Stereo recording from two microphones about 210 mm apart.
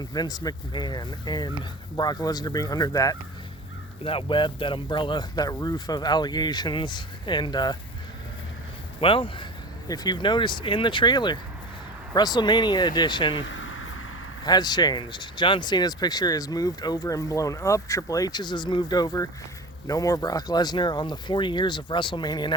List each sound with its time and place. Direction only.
0.0 s speech: 20° left (ahead or behind)
9.0 s speech: 25° left (ahead or behind)
13.4 s vehicle: 65° left (ahead or behind)
14.4 s speech: 20° left (ahead or behind)